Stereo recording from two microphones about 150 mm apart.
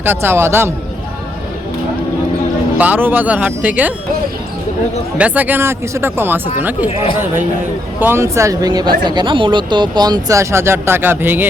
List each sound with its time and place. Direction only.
0.0 s speech: 15° right (ahead or behind)
2.7 s speech: 10° right (ahead or behind)
5.1 s speech: 10° right (ahead or behind)
7.9 s speech: 15° right (ahead or behind)